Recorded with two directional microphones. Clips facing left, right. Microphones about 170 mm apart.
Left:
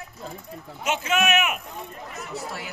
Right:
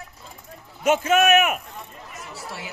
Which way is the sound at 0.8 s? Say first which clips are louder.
Right 6 dB; 45° right (ahead or behind).